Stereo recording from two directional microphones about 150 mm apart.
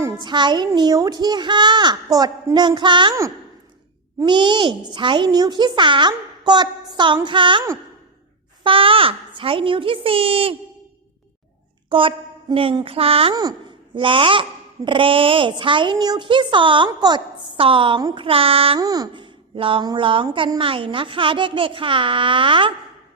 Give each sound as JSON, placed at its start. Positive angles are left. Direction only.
{"t": 0.0, "sound": "a child's voice", "side_deg": -30}
{"t": 4.2, "sound": "a child's voice", "side_deg": -30}
{"t": 8.6, "sound": "a child's voice", "side_deg": -35}
{"t": 11.9, "sound": "a child's voice", "side_deg": -35}
{"t": 18.8, "sound": "a child's voice", "side_deg": -25}